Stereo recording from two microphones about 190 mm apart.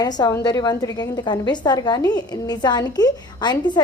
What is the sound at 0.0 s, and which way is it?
A woman's voice, 20° left (ahead or behind).